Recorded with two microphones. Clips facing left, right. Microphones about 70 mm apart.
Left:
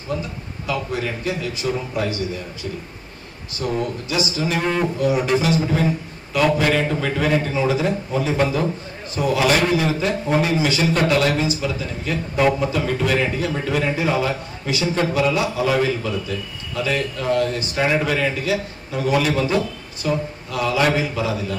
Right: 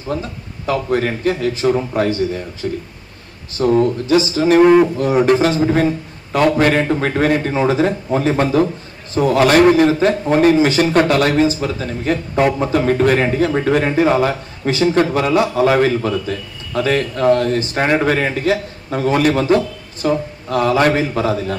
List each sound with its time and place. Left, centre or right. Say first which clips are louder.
0.7 s a man's voice: right 7 dB; right